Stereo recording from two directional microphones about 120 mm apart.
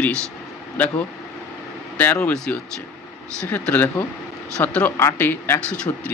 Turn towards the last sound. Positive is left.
turn(degrees=10)  # may be behind; listen again after turning